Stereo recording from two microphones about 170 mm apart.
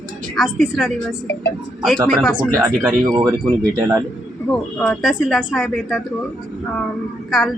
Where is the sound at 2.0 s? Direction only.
Centre (ahead or behind).